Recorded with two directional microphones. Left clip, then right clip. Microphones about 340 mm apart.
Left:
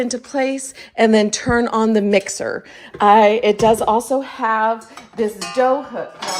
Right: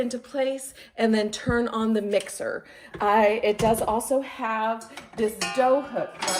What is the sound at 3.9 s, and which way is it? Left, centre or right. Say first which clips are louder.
Speech: left 8 dB; left.